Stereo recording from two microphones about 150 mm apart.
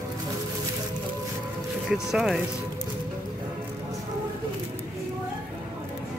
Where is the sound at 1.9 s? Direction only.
Centre (ahead or behind).